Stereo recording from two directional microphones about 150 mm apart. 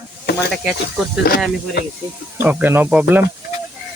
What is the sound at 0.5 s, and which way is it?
Speech, centre (ahead or behind).